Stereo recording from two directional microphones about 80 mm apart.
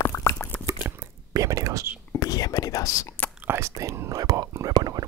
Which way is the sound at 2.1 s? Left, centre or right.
Left.